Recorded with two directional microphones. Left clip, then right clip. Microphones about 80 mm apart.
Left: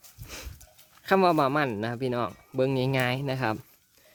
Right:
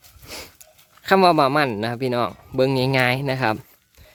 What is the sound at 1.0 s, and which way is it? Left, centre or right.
Speech, right.